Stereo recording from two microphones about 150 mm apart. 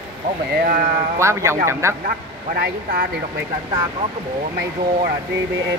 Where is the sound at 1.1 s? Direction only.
20° right (ahead or behind).